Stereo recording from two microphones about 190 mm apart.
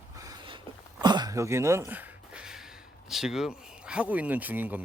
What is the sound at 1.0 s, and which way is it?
Speech, 20° right (ahead or behind).